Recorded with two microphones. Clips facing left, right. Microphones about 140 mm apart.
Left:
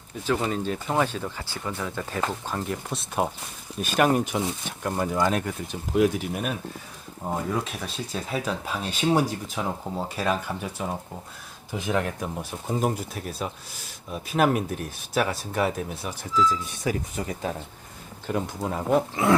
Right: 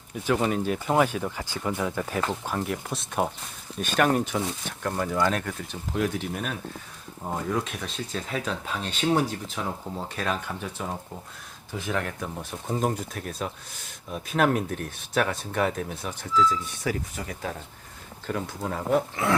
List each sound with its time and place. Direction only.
0.5 s speech: 10° right (ahead or behind); by 16.1 s 5° left (ahead or behind)
16.5 s speech: 20° left (ahead or behind)